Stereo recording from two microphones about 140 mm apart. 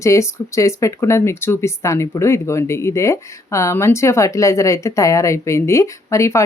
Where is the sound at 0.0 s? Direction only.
20° left (ahead or behind).